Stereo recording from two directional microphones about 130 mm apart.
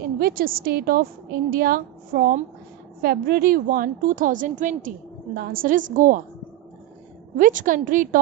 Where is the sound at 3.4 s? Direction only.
90° right.